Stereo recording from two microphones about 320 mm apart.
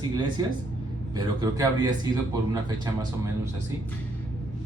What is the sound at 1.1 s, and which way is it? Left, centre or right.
Speech, centre.